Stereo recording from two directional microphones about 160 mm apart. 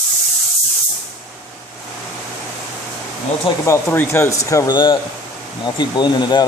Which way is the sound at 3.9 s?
15° left (ahead or behind).